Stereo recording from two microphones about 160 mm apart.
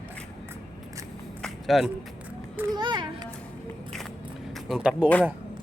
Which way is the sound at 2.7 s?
30° right (ahead or behind).